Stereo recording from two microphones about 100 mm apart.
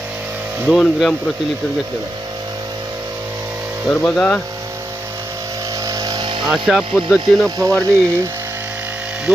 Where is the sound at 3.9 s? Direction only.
10° left (ahead or behind).